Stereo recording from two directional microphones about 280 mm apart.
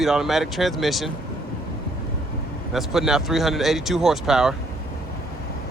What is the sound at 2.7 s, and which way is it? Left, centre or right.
Speech, centre.